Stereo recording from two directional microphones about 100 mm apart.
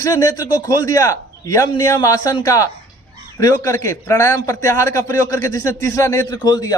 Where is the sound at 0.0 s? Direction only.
40° left (ahead or behind).